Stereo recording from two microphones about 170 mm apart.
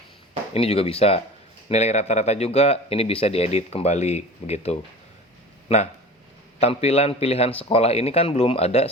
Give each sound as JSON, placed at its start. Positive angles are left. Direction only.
{"t": 0.5, "sound": "speech", "side_deg": 35}